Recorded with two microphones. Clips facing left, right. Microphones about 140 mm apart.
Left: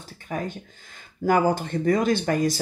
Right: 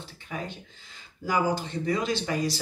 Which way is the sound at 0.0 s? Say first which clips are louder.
Left 6 dB; 45° left (ahead or behind).